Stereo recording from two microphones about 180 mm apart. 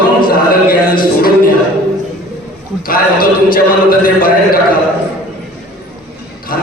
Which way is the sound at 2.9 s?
55° left (ahead or behind).